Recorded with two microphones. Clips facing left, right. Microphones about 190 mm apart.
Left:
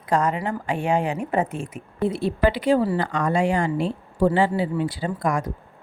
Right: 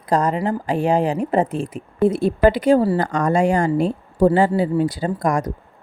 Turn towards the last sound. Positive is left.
turn(degrees=-40)  # may be behind; listen again after turning